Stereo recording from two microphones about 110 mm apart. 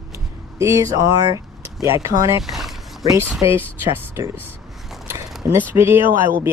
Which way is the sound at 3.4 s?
20° right (ahead or behind).